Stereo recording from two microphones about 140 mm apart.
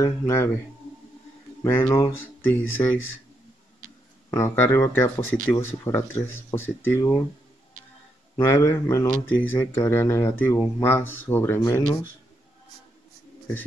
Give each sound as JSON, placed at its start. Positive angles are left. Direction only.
{"t": 0.0, "sound": "speech", "side_deg": 20}
{"t": 1.6, "sound": "speech", "side_deg": 15}
{"t": 4.3, "sound": "speech", "side_deg": 15}
{"t": 8.5, "sound": "speech", "side_deg": 15}